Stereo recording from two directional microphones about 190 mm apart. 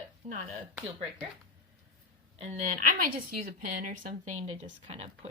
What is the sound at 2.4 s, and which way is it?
A woman's voice, 40° right (ahead or behind).